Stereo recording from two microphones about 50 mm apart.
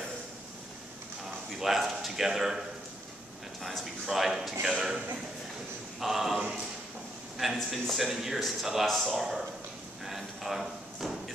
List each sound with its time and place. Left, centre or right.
1.6 s speech: centre
3.6 s speech: centre
5.9 s speech: centre
10.0 s a sound: centre